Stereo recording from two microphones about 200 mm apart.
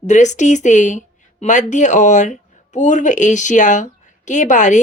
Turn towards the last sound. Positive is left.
turn(degrees=40)  # may be behind; listen again after turning